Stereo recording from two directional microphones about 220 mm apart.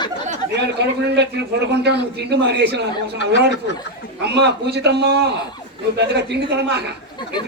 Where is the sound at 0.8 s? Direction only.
50° right (ahead or behind).